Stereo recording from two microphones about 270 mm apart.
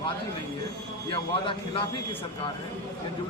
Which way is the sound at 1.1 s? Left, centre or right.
Centre.